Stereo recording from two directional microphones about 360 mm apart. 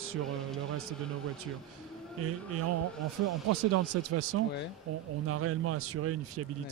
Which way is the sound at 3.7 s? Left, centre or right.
Right.